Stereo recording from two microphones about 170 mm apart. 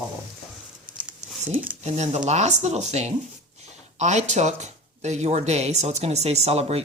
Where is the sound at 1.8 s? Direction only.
40° right (ahead or behind).